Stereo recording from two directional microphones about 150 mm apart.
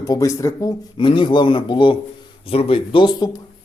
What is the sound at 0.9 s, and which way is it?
A man's voice, 35° left (ahead or behind).